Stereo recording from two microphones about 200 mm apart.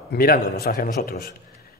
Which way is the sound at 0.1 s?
50° left (ahead or behind).